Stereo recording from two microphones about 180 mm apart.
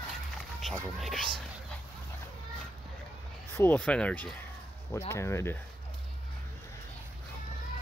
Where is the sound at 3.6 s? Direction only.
10° left (ahead or behind).